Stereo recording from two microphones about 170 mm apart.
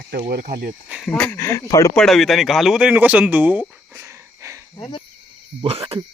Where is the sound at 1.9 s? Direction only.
Centre (ahead or behind); by 4.6 s 15° right (ahead or behind).